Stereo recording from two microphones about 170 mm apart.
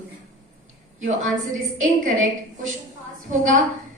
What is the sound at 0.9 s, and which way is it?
Speech, 50° right (ahead or behind).